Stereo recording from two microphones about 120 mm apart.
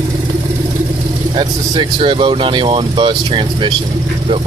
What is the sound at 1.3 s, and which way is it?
Speech, 40° right (ahead or behind).